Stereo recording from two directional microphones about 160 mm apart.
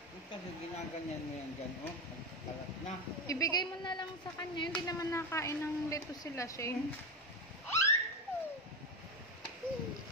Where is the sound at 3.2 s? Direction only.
20° left (ahead or behind).